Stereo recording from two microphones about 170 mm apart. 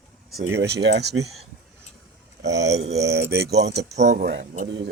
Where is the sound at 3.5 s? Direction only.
80° right.